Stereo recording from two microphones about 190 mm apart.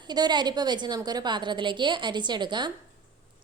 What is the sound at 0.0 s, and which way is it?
A woman's voice, 20° right (ahead or behind).